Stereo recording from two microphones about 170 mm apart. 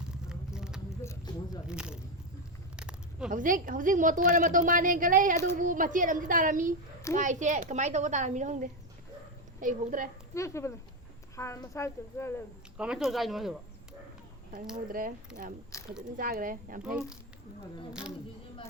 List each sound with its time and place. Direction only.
0.3 s vehicle: 5° right (ahead or behind)
1.0 s a sound: 25° left (ahead or behind)
1.6 s speech: 5° right (ahead or behind)
2.7 s a sound: 5° right (ahead or behind)
3.2 s a woman's voice: 50° right (ahead or behind)
10.3 s a woman's voice: 15° left (ahead or behind)
12.7 s speech: 5° right (ahead or behind)
14.8 s speech: 55° right (ahead or behind)
15.3 s speech: 65° right (ahead or behind)
15.7 s speech: 20° left (ahead or behind)
16.1 s speech: 55° right (ahead or behind)
16.8 s speech: 5° right (ahead or behind)